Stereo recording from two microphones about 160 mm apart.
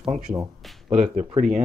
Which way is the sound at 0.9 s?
45° right (ahead or behind).